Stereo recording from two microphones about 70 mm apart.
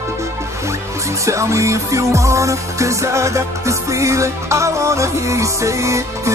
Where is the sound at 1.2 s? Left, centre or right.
Right.